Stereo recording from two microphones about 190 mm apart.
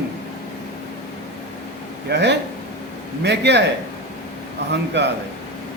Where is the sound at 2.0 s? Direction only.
65° right (ahead or behind).